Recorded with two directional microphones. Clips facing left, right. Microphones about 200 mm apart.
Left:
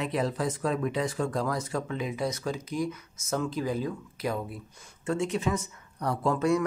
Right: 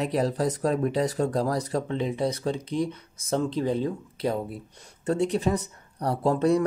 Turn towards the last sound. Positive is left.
turn(degrees=-35)  # may be behind; listen again after turning